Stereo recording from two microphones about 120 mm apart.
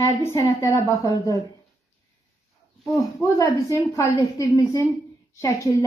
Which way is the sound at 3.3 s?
25° left (ahead or behind).